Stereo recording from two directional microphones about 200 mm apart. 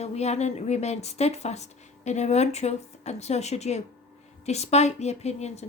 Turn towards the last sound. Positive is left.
turn(degrees=35)  # may be behind; listen again after turning